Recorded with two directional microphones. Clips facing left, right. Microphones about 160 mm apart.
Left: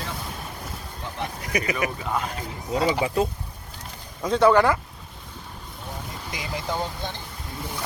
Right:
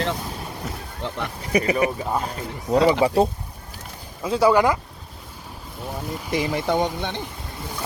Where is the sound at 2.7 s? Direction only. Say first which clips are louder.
Right 6 dB; 70° right (ahead or behind).